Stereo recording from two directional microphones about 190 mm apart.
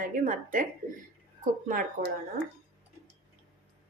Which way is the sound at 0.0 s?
45° right (ahead or behind).